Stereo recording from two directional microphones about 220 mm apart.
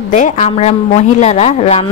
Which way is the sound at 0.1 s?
35° left (ahead or behind).